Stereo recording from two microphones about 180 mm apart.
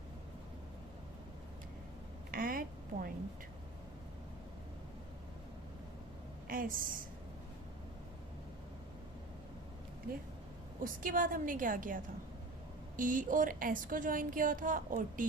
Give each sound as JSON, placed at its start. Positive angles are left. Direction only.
{"t": 2.3, "sound": "a sound", "side_deg": -50}
{"t": 6.5, "sound": "speech", "side_deg": -50}
{"t": 11.0, "sound": "speech", "side_deg": -50}
{"t": 13.0, "sound": "speech", "side_deg": -50}